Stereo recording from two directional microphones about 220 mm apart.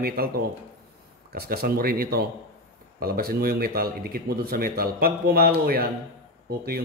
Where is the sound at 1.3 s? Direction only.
45° right (ahead or behind).